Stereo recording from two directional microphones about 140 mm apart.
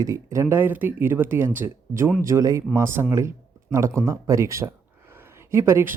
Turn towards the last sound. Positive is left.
turn(degrees=-20)  # may be behind; listen again after turning